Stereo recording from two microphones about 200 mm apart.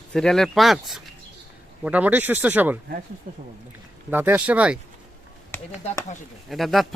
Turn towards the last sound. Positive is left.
turn(degrees=0)  # may be behind; listen again after turning